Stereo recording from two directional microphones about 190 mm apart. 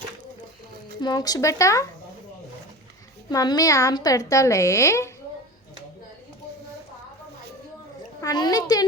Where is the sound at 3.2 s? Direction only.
20° left (ahead or behind).